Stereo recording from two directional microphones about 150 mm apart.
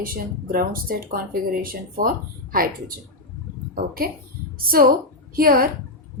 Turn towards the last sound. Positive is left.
turn(degrees=-80)